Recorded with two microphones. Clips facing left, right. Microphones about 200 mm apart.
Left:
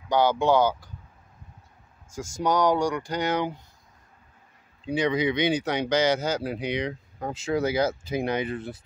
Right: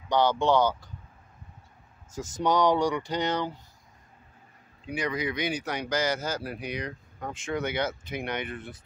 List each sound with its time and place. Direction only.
0.1 s speech: 10° left (ahead or behind)
2.1 s speech: centre (ahead or behind)
4.8 s speech: 25° left (ahead or behind)
6.5 s speech: 90° left
7.2 s speech: 30° left (ahead or behind)